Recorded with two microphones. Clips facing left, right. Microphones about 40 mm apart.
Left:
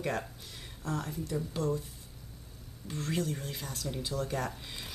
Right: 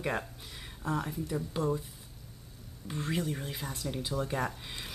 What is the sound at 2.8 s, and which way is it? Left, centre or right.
A woman's voice, centre.